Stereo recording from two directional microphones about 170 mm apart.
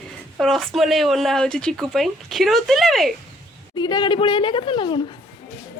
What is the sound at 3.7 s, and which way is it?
A woman's voice, 25° left (ahead or behind).